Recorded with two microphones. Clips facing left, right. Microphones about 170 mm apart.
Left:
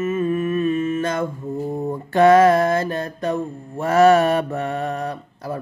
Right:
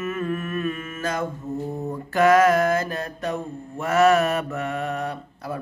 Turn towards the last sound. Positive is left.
turn(degrees=35)  # may be behind; listen again after turning